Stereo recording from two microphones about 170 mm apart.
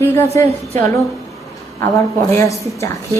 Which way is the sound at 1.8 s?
15° left (ahead or behind).